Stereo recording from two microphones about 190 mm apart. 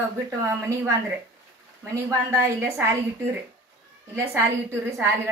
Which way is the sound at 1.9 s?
15° right (ahead or behind).